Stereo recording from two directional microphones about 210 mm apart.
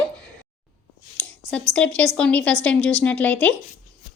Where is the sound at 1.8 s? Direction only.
5° left (ahead or behind).